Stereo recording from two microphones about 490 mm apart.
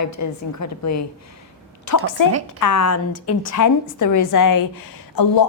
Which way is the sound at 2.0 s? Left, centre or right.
Left.